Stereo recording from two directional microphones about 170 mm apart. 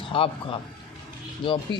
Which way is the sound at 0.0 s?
30° left (ahead or behind).